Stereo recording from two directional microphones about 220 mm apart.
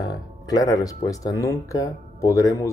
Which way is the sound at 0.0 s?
15° left (ahead or behind).